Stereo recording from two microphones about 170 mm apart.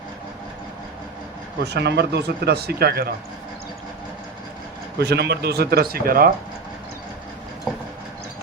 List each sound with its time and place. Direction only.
1.6 s speech: 80° right
4.9 s speech: 75° right (ahead or behind); by 6.3 s 60° right (ahead or behind)